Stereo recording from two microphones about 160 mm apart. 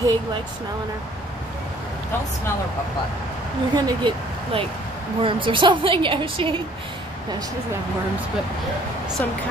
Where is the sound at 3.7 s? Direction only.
25° right (ahead or behind).